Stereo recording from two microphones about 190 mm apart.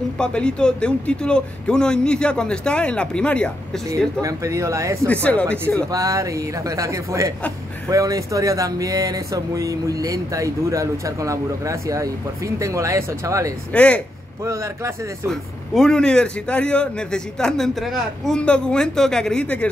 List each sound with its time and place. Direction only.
0.2 s a man's voice: 5° left (ahead or behind)
4.2 s speech: 15° right (ahead or behind)
5.0 s speech: 5° left (ahead or behind)
5.9 s speech: 15° right (ahead or behind)
13.7 s speech: 5° left (ahead or behind)
14.4 s speech: 15° right (ahead or behind)
15.2 s a man's voice: centre (ahead or behind)